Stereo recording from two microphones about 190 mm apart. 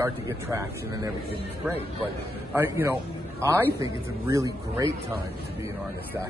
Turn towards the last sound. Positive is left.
turn(degrees=-20)  # may be behind; listen again after turning